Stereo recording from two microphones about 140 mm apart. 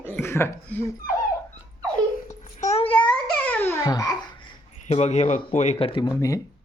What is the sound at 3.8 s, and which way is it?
Speech, 25° left (ahead or behind).